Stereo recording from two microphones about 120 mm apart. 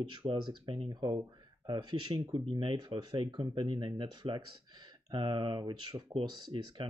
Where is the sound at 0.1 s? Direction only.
40° right (ahead or behind).